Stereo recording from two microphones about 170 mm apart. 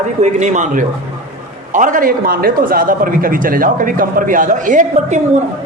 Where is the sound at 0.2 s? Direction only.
45° right (ahead or behind).